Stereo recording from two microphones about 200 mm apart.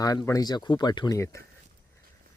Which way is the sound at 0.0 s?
20° left (ahead or behind).